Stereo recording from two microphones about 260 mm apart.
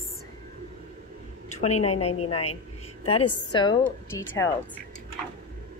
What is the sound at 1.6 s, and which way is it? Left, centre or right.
A woman's voice, left.